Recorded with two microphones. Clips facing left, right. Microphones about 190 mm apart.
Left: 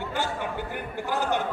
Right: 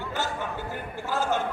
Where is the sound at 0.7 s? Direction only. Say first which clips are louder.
Even; 15° left (ahead or behind).